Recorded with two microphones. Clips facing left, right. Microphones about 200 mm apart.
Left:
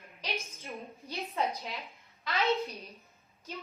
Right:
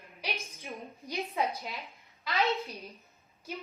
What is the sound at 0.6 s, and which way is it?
Speech, 15° right (ahead or behind).